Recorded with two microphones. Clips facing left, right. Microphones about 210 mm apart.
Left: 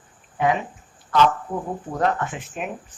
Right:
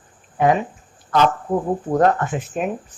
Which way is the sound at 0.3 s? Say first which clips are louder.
Right 4 dB; 45° right (ahead or behind).